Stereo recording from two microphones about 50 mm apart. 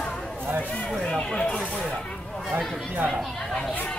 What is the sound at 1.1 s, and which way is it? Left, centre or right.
Speech, centre.